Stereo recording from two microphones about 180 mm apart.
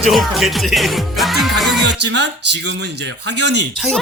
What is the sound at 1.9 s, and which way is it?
Speech, 70° right (ahead or behind).